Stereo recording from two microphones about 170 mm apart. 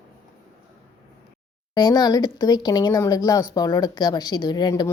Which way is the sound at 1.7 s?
25° left (ahead or behind).